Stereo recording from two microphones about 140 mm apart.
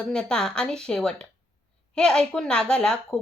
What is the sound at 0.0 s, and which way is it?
A woman's voice, 5° left (ahead or behind).